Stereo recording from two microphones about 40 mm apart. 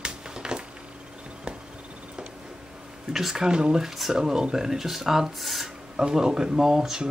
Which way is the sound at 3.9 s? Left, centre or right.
Centre.